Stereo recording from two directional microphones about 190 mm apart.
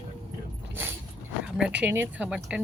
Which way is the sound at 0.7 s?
10° right (ahead or behind).